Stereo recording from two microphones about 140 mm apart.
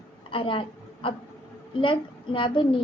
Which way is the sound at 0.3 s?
40° left (ahead or behind).